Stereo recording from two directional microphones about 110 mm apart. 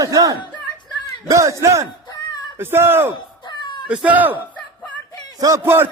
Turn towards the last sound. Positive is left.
turn(degrees=-25)  # may be behind; listen again after turning